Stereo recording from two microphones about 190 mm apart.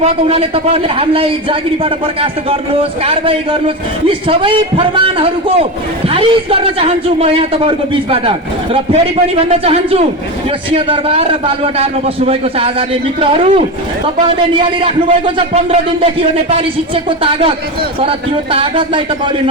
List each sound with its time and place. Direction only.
0.0 s a man's voice: 30° right (ahead or behind)
15.5 s a man's voice: 30° right (ahead or behind)
18.5 s a man's voice: 25° right (ahead or behind)